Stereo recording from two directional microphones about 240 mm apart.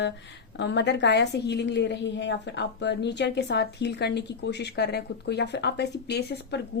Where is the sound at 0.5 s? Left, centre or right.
Left.